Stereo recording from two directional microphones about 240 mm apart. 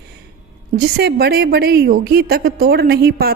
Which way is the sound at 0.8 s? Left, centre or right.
Right.